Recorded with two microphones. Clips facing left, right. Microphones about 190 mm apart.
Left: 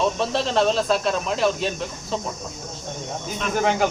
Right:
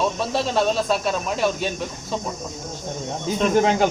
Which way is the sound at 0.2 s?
Centre (ahead or behind).